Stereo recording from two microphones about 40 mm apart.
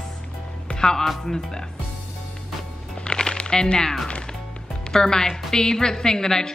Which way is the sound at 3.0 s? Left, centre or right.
Left.